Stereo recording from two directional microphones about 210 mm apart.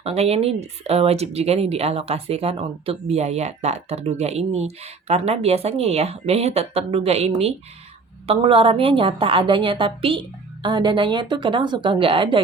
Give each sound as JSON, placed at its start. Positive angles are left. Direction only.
{"t": 0.0, "sound": "speech", "side_deg": -30}